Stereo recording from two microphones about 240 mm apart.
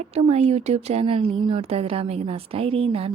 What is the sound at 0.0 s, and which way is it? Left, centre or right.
Speech, right.